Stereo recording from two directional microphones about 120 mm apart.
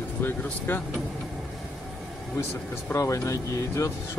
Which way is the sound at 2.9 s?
20° left (ahead or behind).